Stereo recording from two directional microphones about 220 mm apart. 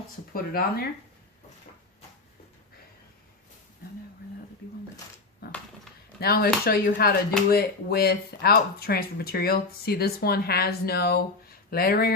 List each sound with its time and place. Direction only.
0.3 s speech: 40° left (ahead or behind)
6.1 s speech: 45° left (ahead or behind)